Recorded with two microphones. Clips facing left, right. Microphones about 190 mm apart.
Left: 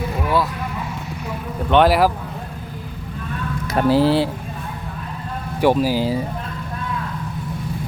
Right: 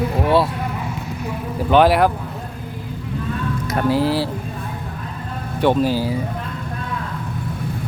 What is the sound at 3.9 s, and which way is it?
Speech, 30° left (ahead or behind).